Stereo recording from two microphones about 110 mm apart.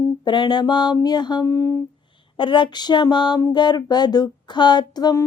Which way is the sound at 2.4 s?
45° left (ahead or behind).